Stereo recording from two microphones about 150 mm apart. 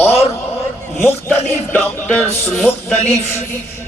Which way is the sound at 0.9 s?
15° left (ahead or behind).